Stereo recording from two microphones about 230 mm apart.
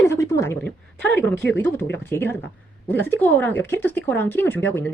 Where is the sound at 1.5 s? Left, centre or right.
Centre.